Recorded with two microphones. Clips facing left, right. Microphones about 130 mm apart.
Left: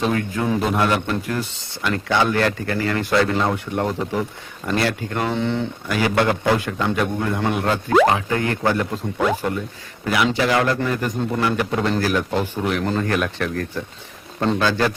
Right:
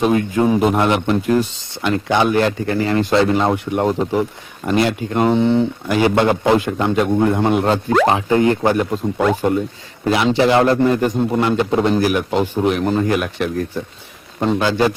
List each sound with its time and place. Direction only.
0.0 s a man's voice: 20° right (ahead or behind)